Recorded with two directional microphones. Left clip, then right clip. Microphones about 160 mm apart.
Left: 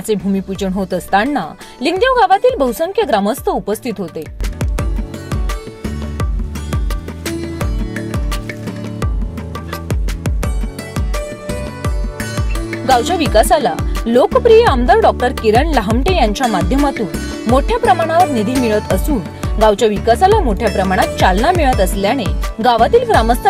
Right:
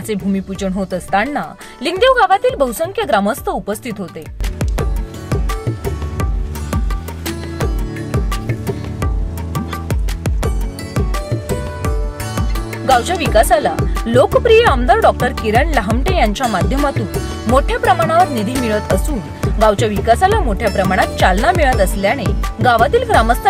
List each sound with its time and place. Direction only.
0.1 s a woman's voice: centre (ahead or behind)
9.9 s music: centre (ahead or behind)
12.9 s a woman's voice: 5° left (ahead or behind)
17.7 s a woman's voice: 5° right (ahead or behind)